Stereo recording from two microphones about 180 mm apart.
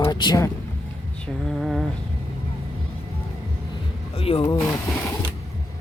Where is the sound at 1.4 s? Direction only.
Centre (ahead or behind).